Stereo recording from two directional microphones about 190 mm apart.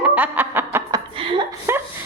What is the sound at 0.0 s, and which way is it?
Snicker, 10° right (ahead or behind).